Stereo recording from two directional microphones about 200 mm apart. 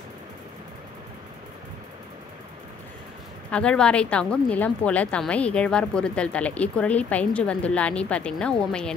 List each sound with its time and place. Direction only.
3.4 s a woman's voice: 5° left (ahead or behind)